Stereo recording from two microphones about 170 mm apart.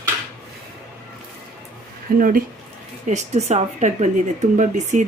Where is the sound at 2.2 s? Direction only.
55° right (ahead or behind).